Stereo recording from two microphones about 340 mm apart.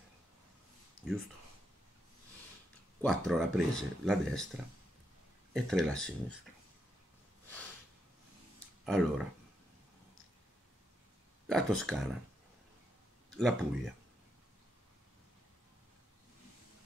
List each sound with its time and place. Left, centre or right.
1.0 s a sound: left
3.0 s speech: centre
5.5 s speech: centre
8.8 s speech: centre
11.4 s speech: centre
13.4 s speech: centre